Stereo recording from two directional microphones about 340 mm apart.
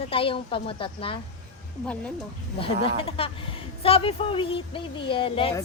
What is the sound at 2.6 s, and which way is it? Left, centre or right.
Speech, centre.